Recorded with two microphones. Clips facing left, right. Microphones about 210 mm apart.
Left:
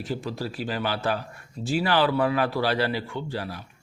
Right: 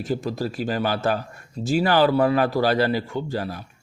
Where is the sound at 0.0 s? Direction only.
45° right (ahead or behind).